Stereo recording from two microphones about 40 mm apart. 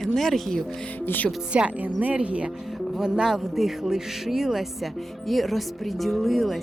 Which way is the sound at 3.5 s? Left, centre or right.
Centre.